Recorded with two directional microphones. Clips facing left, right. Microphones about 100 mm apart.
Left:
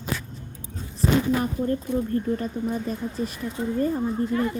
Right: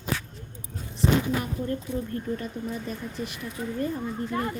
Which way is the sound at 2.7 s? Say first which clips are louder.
Left 5 dB; 40° left (ahead or behind).